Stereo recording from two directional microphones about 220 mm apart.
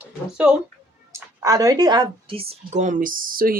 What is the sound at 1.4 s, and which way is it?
Speech, 15° right (ahead or behind).